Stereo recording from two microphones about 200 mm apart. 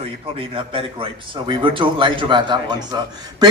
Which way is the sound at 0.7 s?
25° right (ahead or behind).